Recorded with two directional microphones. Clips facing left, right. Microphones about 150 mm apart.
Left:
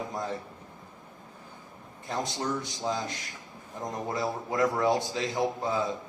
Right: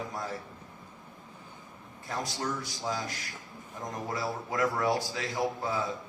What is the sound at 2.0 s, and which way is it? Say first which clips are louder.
A man's voice: left 3 dB; 25° left (ahead or behind).